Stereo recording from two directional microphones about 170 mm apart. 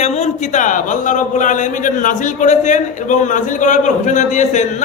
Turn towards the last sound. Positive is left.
turn(degrees=45)  # may be behind; listen again after turning